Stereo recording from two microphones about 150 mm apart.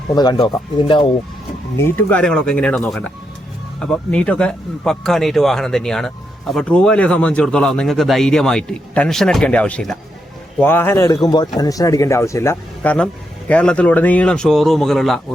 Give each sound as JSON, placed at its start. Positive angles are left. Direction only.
{"t": 0.1, "sound": "speech", "side_deg": 30}
{"t": 1.7, "sound": "a man's voice", "side_deg": 15}